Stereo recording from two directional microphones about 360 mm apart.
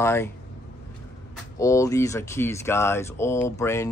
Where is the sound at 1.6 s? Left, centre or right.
Centre.